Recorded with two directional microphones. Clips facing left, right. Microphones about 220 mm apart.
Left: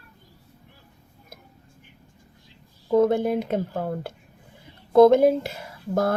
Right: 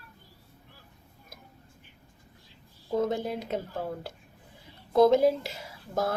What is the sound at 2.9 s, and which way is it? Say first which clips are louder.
Speech: left 9 dB; 55° left (ahead or behind).